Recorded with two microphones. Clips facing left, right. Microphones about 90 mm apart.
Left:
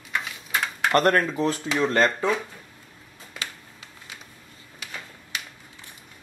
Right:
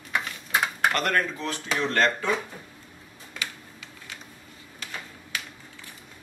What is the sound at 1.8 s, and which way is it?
Speech, 15° left (ahead or behind).